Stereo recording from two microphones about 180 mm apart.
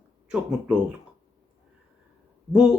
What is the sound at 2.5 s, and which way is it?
Speech, 5° right (ahead or behind).